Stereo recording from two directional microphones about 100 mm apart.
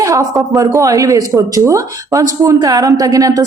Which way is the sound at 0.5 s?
30° right (ahead or behind).